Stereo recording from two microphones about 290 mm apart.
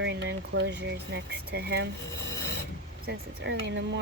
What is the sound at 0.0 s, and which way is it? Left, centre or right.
Speech, right.